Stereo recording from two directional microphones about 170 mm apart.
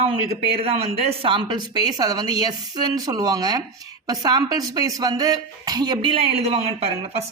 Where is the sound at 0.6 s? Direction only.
35° right (ahead or behind).